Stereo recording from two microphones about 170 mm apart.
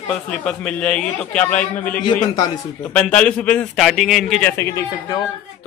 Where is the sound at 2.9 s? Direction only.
5° left (ahead or behind).